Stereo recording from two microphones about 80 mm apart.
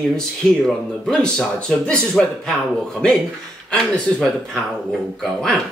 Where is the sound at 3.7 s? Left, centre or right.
Centre.